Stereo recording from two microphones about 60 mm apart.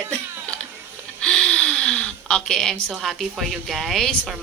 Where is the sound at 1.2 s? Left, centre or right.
Centre.